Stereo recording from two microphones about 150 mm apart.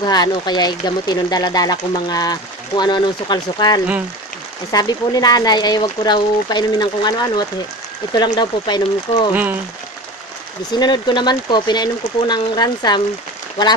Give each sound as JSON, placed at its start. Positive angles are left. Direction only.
{"t": 0.0, "sound": "speech", "side_deg": 30}
{"t": 9.3, "sound": "speech", "side_deg": -10}
{"t": 10.7, "sound": "speech", "side_deg": 30}